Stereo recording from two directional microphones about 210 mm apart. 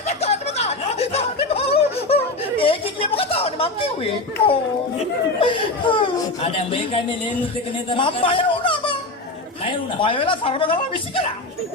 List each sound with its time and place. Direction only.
0.1 s a sound: 30° left (ahead or behind)
4.9 s speech: 25° left (ahead or behind)
10.0 s speech: 25° left (ahead or behind)